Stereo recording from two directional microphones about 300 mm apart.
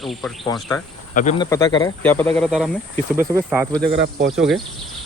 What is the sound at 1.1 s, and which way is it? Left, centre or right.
Speech, left.